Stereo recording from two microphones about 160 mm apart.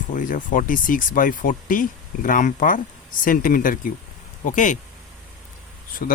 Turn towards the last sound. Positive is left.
turn(degrees=60)  # may be behind; listen again after turning